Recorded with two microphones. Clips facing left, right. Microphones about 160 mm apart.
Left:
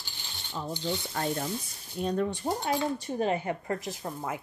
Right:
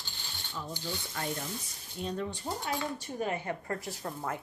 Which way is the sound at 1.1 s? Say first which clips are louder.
Left 4 dB; 50° left (ahead or behind).